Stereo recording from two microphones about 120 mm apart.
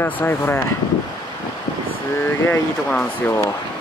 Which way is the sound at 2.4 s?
20° left (ahead or behind).